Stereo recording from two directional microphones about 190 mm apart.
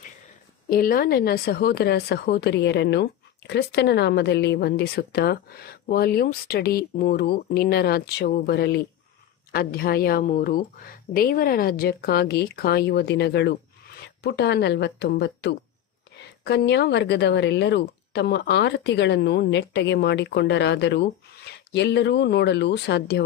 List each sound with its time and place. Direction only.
0.7 s speech: 50° left (ahead or behind)